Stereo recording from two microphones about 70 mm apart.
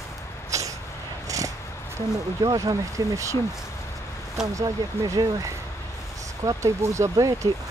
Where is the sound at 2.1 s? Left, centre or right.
Right.